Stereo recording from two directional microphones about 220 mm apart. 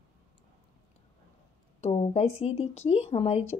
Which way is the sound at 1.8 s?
25° left (ahead or behind).